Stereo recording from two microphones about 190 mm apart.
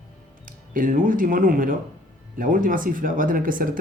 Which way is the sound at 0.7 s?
45° right (ahead or behind).